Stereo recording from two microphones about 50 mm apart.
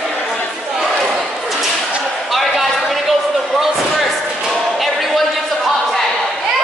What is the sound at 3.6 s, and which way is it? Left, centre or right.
Slam, centre.